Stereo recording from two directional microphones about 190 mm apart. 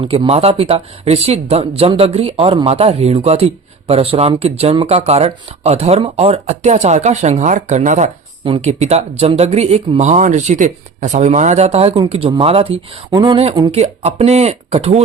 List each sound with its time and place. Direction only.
0.0 s speech: 30° right (ahead or behind)